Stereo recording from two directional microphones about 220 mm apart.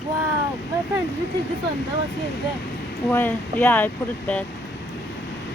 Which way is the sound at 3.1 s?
10° left (ahead or behind).